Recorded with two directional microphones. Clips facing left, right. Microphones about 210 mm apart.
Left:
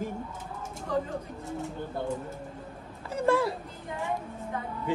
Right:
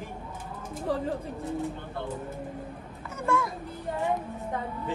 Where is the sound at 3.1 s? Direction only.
35° left (ahead or behind).